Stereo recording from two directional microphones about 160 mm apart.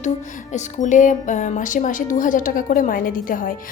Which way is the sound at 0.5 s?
50° left (ahead or behind).